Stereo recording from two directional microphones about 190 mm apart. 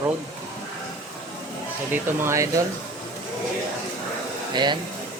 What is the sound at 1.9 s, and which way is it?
Speech, 15° right (ahead or behind).